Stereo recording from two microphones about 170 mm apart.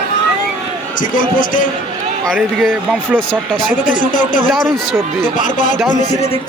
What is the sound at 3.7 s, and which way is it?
Speech, 50° left (ahead or behind).